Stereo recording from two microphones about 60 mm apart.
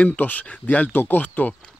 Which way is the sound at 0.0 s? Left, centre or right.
Left.